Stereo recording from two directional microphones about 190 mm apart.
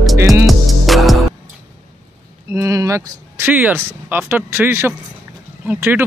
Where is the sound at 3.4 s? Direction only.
10° right (ahead or behind).